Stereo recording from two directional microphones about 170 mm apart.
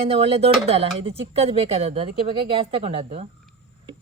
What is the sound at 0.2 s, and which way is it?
A woman's voice, 35° right (ahead or behind).